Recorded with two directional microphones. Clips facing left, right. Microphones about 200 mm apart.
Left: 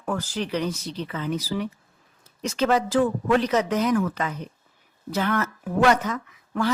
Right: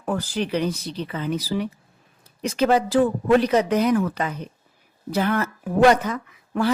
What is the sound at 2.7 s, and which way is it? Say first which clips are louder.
Speech: right 2 dB; 35° right (ahead or behind).